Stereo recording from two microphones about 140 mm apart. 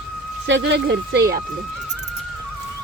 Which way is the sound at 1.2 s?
90° right.